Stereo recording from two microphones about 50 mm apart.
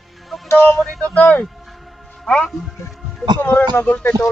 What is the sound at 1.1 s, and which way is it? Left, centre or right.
A man's voice, left.